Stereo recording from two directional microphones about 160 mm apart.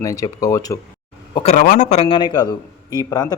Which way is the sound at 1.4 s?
60° left (ahead or behind).